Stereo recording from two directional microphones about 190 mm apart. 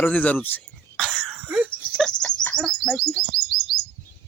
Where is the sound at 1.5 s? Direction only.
10° right (ahead or behind).